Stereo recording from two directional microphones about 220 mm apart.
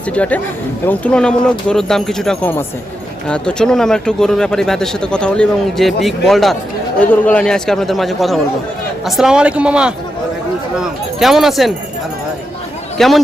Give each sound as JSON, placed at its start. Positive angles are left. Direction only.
{"t": 0.1, "sound": "speech", "side_deg": 5}
{"t": 13.0, "sound": "speech", "side_deg": 0}